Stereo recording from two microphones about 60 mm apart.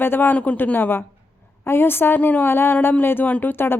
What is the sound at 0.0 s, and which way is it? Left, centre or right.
Speech, left.